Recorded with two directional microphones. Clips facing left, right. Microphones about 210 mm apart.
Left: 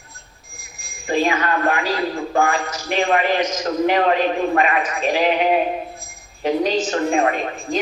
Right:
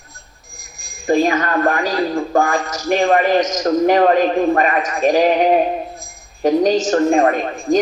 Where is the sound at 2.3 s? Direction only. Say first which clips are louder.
Right 1 dB; 45° right (ahead or behind).